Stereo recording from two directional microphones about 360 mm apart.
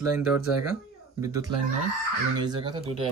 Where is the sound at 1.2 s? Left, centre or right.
Centre.